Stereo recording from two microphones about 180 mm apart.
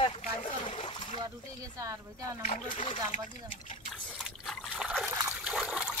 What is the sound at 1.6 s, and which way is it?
Speech, 20° right (ahead or behind).